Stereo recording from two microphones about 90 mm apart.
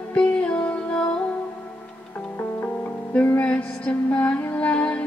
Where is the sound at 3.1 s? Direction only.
20° left (ahead or behind).